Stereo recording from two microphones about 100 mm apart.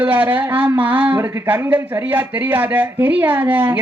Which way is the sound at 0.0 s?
15° right (ahead or behind).